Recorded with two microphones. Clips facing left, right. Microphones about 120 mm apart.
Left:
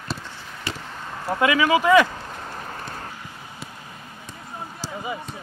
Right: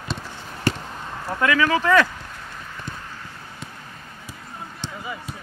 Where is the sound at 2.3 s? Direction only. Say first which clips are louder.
Left 4 dB; 40° left (ahead or behind).